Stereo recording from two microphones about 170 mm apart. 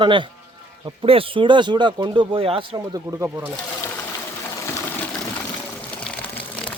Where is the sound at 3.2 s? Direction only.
15° right (ahead or behind).